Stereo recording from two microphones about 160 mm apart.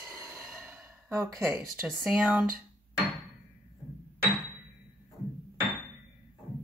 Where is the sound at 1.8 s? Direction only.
5° right (ahead or behind).